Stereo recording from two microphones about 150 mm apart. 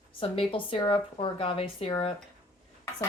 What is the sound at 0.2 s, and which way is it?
Speech, 35° left (ahead or behind).